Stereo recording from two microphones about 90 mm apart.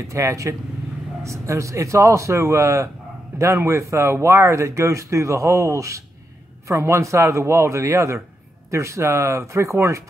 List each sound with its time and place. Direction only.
0.1 s speech: 35° right (ahead or behind)